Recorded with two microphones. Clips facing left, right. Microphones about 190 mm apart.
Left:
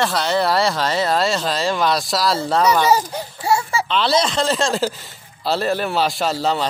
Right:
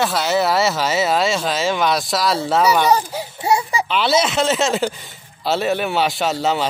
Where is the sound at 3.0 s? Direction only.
5° right (ahead or behind).